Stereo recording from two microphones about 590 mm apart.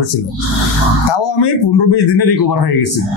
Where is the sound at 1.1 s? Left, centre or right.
Left.